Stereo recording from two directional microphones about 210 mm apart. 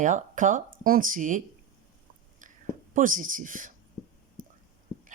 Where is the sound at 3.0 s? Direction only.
40° right (ahead or behind).